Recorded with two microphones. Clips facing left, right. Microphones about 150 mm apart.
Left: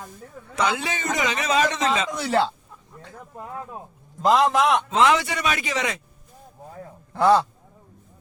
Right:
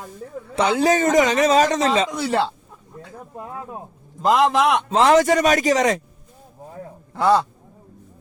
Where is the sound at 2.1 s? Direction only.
5° right (ahead or behind).